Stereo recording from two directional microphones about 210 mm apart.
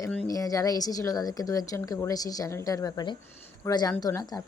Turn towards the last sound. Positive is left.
turn(degrees=20)  # may be behind; listen again after turning